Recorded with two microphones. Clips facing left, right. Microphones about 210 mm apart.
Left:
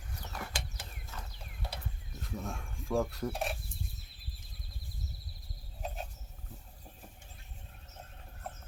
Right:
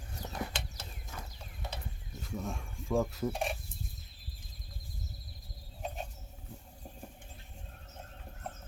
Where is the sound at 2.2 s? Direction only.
Centre (ahead or behind).